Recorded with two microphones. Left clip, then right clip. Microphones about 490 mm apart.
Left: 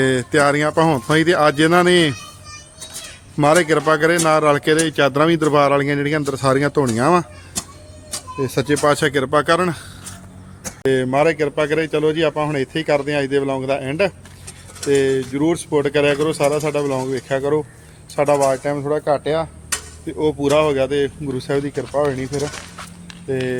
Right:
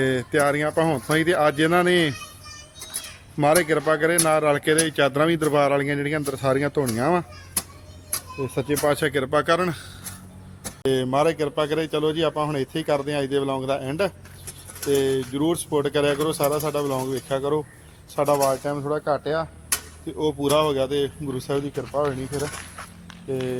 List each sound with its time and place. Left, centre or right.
0.0 s speech: right
3.3 s speech: right
10.8 s a man's voice: right
23.3 s a man's voice: right